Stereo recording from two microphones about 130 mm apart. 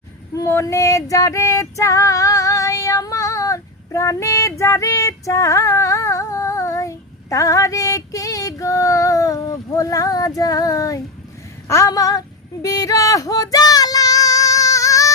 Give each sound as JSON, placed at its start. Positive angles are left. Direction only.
{"t": 0.3, "sound": "female singing", "side_deg": 20}
{"t": 11.7, "sound": "speech", "side_deg": 25}
{"t": 12.6, "sound": "female singing", "side_deg": 25}